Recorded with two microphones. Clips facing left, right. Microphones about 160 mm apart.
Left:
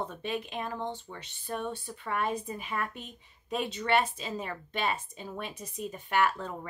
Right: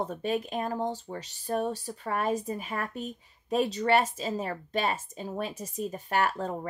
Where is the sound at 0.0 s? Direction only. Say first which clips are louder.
Right 5 dB; 40° right (ahead or behind).